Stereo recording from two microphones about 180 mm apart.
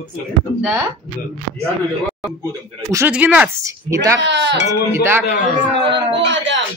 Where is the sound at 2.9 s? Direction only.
10° right (ahead or behind).